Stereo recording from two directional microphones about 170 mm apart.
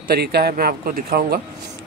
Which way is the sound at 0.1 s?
70° right (ahead or behind).